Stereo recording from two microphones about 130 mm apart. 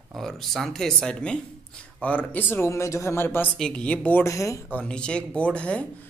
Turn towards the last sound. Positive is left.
turn(degrees=10)  # may be behind; listen again after turning